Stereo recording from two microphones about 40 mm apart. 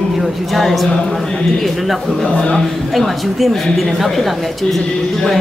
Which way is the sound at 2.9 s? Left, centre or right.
Centre.